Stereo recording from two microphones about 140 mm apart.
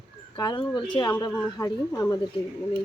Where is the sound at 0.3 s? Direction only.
35° left (ahead or behind).